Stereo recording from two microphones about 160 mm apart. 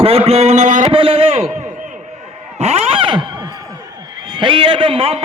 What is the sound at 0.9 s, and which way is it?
Speech, 35° right (ahead or behind).